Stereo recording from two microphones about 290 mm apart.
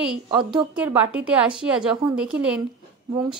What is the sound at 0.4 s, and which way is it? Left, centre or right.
Speech, centre.